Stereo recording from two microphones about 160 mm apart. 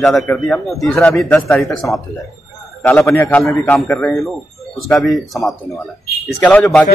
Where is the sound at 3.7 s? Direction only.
Centre (ahead or behind).